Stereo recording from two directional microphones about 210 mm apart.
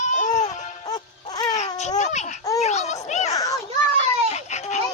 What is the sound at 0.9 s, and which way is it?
Music, 20° left (ahead or behind).